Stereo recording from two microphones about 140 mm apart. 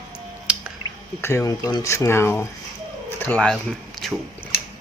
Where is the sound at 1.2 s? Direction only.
20° left (ahead or behind); by 4.1 s 5° left (ahead or behind).